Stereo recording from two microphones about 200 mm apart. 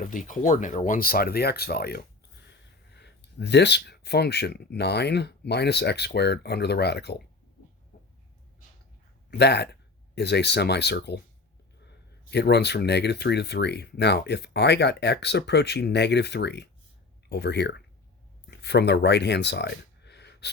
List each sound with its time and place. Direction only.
0.0 s speech: 40° left (ahead or behind)
9.4 s speech: 55° left (ahead or behind)